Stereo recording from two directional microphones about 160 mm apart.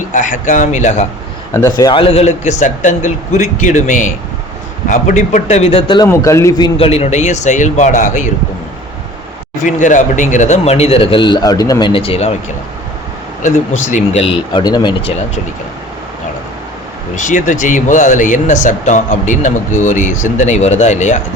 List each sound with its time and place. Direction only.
0.1 s speech: 55° left (ahead or behind)
1.5 s speech: 20° left (ahead or behind); by 6.0 s 40° left (ahead or behind)
6.1 s a man's voice: 20° left (ahead or behind)
6.7 s speech: 35° left (ahead or behind)
9.6 s speech: 50° left (ahead or behind)
13.4 s speech: 50° left (ahead or behind); by 15.1 s 25° left (ahead or behind)
17.2 s speech: 50° left (ahead or behind)